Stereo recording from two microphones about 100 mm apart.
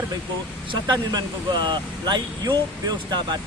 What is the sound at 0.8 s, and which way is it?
Speech, 45° right (ahead or behind).